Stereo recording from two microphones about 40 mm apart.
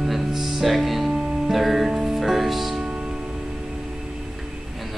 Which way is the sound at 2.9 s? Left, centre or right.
Centre.